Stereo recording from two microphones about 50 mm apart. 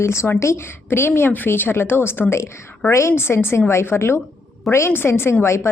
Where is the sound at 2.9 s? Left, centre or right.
Left.